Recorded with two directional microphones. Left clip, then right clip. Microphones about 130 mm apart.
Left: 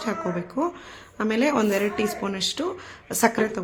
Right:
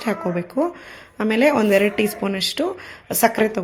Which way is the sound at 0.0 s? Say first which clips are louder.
Right 4 dB; 20° right (ahead or behind).